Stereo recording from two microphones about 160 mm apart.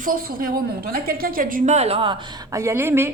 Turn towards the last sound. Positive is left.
turn(degrees=-15)  # may be behind; listen again after turning